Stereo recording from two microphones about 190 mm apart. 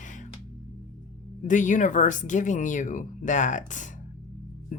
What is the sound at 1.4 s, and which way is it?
Speech, 40° left (ahead or behind).